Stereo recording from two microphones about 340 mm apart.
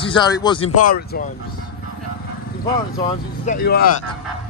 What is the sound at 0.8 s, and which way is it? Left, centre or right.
Speech, left.